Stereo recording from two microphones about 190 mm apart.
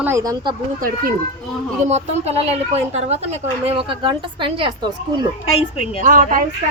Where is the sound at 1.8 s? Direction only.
35° right (ahead or behind).